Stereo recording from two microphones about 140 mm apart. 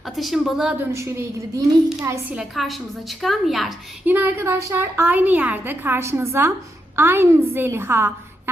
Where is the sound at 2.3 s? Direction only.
Centre (ahead or behind).